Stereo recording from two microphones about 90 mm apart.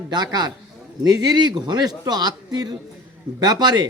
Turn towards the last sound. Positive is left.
turn(degrees=-50)  # may be behind; listen again after turning